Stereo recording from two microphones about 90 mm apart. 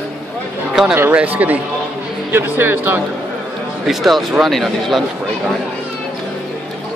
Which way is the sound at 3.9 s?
Centre (ahead or behind).